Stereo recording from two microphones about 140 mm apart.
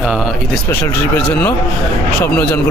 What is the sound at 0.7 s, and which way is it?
Speech, 15° left (ahead or behind).